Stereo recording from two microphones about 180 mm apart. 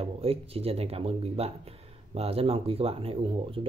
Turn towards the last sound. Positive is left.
turn(degrees=-30)  # may be behind; listen again after turning